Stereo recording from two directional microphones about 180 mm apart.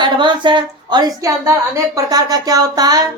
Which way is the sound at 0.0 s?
25° right (ahead or behind).